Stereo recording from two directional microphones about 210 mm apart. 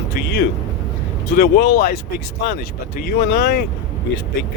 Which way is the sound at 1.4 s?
50° left (ahead or behind).